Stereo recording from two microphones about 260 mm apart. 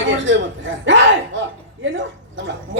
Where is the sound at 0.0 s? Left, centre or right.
Right.